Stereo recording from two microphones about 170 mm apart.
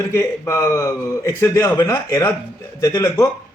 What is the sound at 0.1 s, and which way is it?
A man's voice, 15° left (ahead or behind).